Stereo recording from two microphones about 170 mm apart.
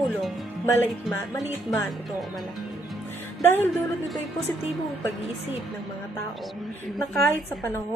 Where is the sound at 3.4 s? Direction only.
15° left (ahead or behind).